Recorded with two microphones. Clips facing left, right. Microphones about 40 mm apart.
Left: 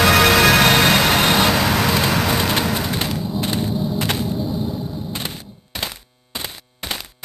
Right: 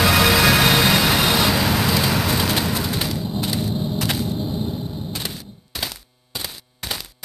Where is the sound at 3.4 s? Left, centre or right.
Centre.